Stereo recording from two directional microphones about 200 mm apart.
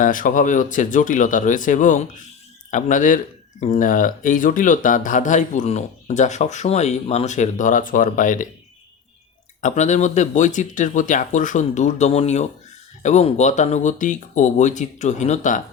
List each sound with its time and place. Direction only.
0.0 s speech: 40° left (ahead or behind)
9.6 s speech: 35° left (ahead or behind)